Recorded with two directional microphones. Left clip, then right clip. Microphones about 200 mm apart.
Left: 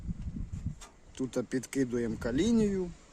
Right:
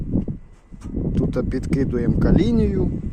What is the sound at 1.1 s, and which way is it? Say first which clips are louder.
Speech: right 8 dB; 5° right (ahead or behind).